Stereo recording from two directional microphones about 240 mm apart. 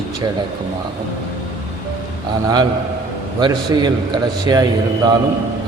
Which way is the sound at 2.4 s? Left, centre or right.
Centre.